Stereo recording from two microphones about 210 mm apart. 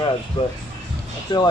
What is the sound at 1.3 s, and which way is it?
Speech, 20° left (ahead or behind).